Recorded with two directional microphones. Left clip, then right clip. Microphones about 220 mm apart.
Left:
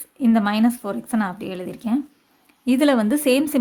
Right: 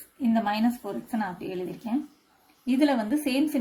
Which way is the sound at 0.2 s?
50° left (ahead or behind).